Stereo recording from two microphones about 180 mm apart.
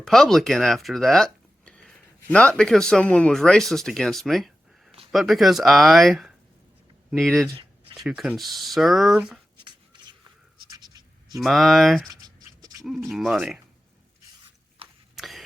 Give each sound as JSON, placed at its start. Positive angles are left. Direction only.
{"t": 0.0, "sound": "speech", "side_deg": 0}
{"t": 9.6, "sound": "shuffle", "side_deg": -25}
{"t": 10.7, "sound": "a sound", "side_deg": -20}
{"t": 11.3, "sound": "speech", "side_deg": 0}
{"t": 12.1, "sound": "writing", "side_deg": -20}
{"t": 12.8, "sound": "speech", "side_deg": 0}
{"t": 15.1, "sound": "cough", "side_deg": 0}